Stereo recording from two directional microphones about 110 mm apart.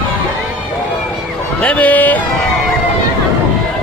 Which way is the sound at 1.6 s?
10° left (ahead or behind).